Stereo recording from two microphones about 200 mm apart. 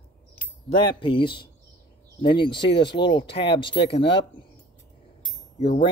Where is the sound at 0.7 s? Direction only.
25° left (ahead or behind).